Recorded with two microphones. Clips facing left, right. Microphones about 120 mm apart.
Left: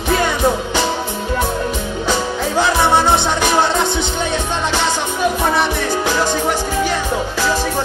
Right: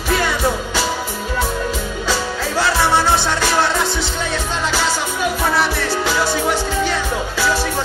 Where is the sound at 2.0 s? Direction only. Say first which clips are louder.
Left 3 dB; 20° left (ahead or behind).